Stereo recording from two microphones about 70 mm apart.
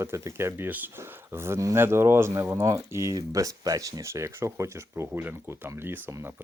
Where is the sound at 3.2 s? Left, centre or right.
Right.